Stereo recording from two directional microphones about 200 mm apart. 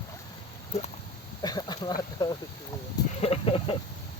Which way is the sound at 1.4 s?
20° left (ahead or behind).